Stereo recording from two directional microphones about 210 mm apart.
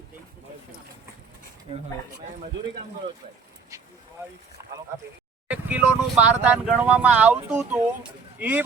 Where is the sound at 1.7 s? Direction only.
30° right (ahead or behind).